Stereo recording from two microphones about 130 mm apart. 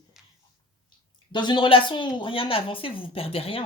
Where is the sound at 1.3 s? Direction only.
35° left (ahead or behind).